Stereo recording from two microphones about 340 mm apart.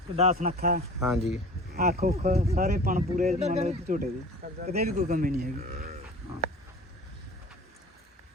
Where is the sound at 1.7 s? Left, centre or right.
Right.